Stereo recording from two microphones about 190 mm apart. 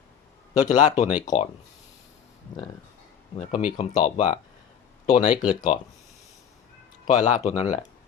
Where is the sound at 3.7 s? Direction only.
25° left (ahead or behind).